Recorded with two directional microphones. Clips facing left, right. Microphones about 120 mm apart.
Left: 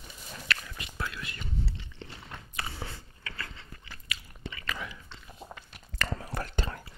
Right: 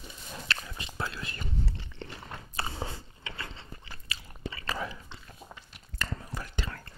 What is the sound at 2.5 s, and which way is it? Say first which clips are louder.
Gears: right 4 dB; 30° right (ahead or behind).